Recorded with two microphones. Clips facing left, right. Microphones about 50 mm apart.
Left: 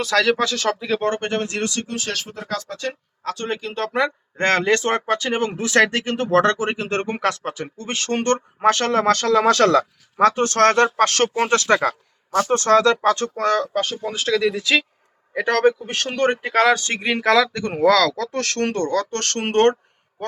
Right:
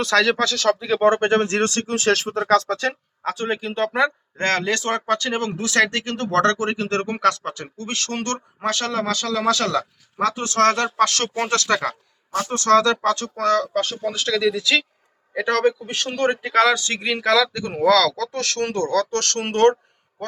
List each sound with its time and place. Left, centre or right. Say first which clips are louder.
0.0 s speech: even; centre
0.5 s speech: right 3 dB; left
0.8 s speech: right 1 dB; centre
1.0 s speech: right 9 dB; right
1.9 s speech: right 8 dB; right
2.9 s speech: right 2 dB; centre
4.4 s speech: left 3 dB; left
5.0 s speech: left 1 dB; centre
5.9 s speech: left 3 dB; centre; by 19.7 s left